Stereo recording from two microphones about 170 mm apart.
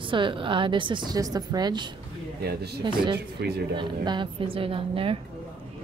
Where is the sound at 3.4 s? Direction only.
70° right (ahead or behind).